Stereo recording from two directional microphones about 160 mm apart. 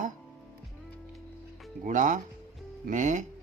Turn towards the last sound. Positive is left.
turn(degrees=-50)  # may be behind; listen again after turning